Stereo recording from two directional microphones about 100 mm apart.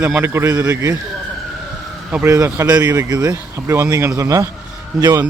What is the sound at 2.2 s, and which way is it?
Speech, 30° right (ahead or behind).